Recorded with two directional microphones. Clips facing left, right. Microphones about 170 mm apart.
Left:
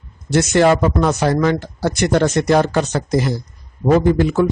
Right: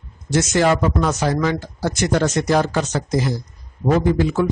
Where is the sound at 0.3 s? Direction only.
60° left (ahead or behind).